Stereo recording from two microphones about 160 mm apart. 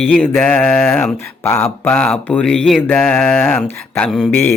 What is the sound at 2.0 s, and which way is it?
Speech, 5° left (ahead or behind).